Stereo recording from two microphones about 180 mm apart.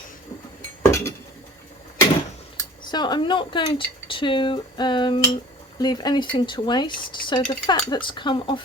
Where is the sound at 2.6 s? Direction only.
25° left (ahead or behind).